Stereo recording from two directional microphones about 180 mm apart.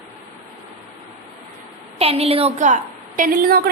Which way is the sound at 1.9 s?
35° right (ahead or behind).